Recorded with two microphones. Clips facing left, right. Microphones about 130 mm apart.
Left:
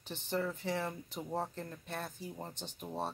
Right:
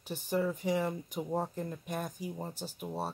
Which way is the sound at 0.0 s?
10° right (ahead or behind).